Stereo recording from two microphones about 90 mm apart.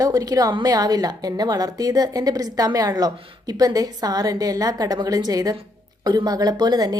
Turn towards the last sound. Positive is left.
turn(degrees=-50)  # may be behind; listen again after turning